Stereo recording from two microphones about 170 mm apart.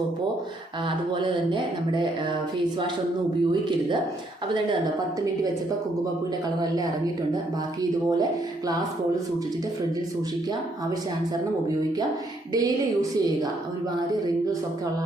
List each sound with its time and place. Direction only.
0.9 s speech: 30° right (ahead or behind)
7.8 s speech: 20° right (ahead or behind)
12.5 s speech: 20° right (ahead or behind)